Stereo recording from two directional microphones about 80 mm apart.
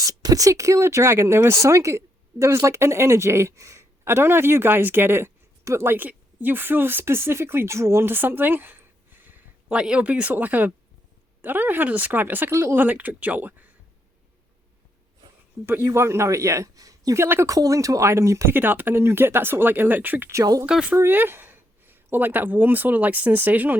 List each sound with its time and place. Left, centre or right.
0.0 s speech: right
9.6 s speech: centre
15.8 s a man's voice: right
17.2 s speech: right
17.5 s a man's voice: right
18.5 s speech: right
20.3 s speech: right
20.7 s speech: centre
20.9 s speech: right